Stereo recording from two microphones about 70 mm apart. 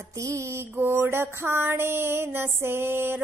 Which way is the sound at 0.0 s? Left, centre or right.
Right.